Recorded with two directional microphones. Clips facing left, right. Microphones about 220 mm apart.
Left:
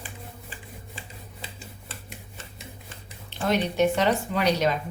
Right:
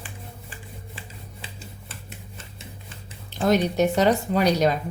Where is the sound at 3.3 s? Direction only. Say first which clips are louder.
Right 4 dB; 40° right (ahead or behind).